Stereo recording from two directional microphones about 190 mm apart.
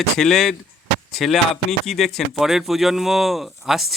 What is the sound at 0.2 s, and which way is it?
Speech, centre (ahead or behind).